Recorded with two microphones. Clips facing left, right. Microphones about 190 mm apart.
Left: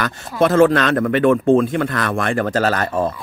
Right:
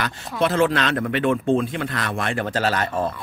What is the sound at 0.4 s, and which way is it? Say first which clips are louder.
Speech: left 6 dB; 45° left (ahead or behind).